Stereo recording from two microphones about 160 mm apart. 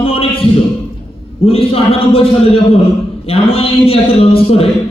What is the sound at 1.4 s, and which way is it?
A man's voice, 35° left (ahead or behind).